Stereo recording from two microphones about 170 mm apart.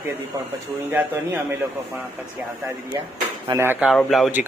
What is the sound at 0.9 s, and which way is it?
Speech, 10° right (ahead or behind).